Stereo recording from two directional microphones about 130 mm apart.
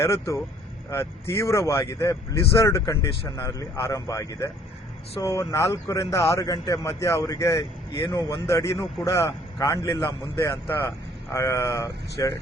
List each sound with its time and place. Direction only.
0.0 s speech: 20° left (ahead or behind)